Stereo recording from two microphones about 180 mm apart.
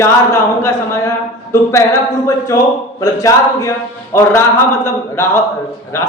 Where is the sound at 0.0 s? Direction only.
15° left (ahead or behind).